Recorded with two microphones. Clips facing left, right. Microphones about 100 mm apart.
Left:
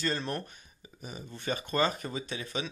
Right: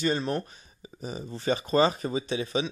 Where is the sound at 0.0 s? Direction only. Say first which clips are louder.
Right 6 dB; 20° right (ahead or behind).